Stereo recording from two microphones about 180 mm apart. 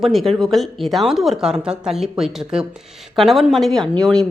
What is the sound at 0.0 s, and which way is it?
A woman's voice, centre (ahead or behind).